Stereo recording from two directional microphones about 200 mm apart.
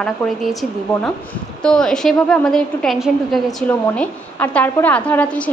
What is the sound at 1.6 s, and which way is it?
A woman's voice, 5° left (ahead or behind).